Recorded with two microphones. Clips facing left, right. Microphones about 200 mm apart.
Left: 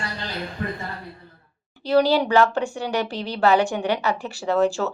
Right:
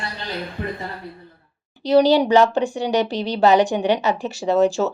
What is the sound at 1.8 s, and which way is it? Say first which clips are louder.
Speech: right 4 dB; 20° right (ahead or behind).